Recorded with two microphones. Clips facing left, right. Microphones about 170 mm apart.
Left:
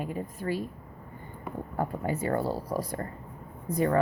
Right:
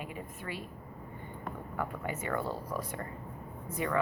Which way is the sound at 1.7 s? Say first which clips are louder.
Left 7 dB; 35° left (ahead or behind).